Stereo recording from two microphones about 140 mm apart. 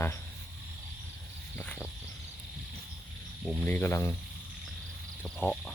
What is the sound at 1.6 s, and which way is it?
Speech, 15° left (ahead or behind).